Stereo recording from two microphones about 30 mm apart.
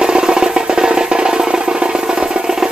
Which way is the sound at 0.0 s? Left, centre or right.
Right.